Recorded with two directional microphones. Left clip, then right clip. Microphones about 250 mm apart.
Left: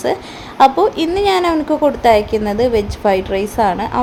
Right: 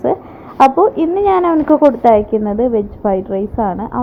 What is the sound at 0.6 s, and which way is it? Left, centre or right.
A woman's voice, centre.